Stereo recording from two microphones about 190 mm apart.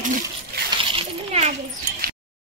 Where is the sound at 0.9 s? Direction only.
35° right (ahead or behind).